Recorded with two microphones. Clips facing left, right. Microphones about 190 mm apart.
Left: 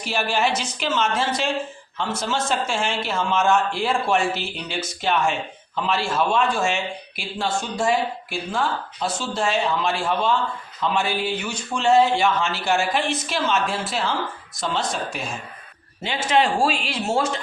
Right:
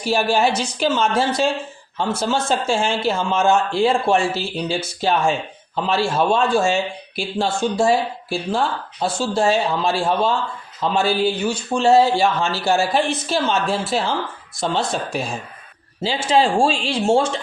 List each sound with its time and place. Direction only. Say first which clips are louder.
0.0 s a man's voice: right 5 dB; 35° right (ahead or behind)
16.0 s speech: right 3 dB; 30° right (ahead or behind)